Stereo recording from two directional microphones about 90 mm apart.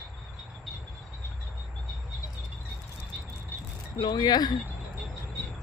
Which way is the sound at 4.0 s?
55° left (ahead or behind).